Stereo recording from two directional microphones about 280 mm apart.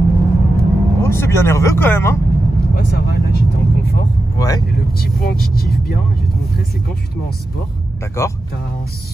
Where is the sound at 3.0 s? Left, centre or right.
Left.